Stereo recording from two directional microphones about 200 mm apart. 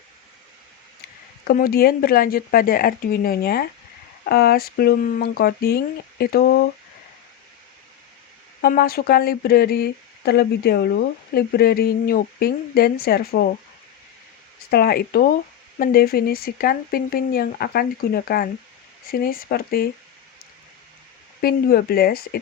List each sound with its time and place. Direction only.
1.5 s speech: 50° left (ahead or behind)
8.6 s speech: 45° left (ahead or behind)
14.7 s speech: 50° left (ahead or behind)
21.4 s speech: 50° left (ahead or behind)